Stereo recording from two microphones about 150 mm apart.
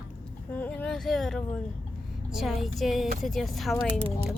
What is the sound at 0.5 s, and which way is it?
Speech, 10° left (ahead or behind).